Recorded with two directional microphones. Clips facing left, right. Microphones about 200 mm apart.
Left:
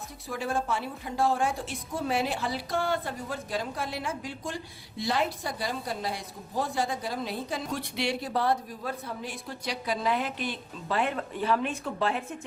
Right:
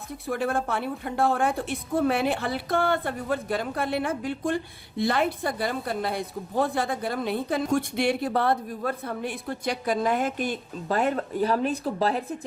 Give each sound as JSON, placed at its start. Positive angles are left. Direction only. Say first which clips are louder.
{"t": 0.3, "sound": "a woman's voice", "louder": "right 4 dB", "side_deg": -55}